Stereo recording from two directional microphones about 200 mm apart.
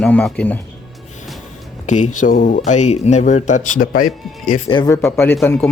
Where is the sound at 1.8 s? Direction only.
35° left (ahead or behind).